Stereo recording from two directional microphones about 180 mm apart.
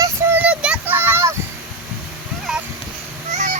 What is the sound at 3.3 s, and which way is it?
Honk, 40° right (ahead or behind).